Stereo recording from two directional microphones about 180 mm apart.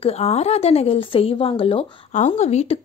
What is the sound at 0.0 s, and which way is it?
A woman's voice, 35° left (ahead or behind).